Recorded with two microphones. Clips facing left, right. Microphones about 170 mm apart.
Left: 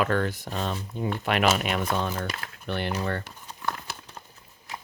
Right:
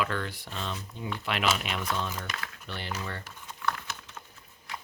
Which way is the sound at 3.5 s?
35° left (ahead or behind).